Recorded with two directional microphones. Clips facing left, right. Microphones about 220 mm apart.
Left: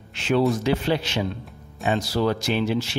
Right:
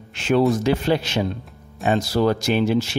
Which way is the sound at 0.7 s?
45° right (ahead or behind).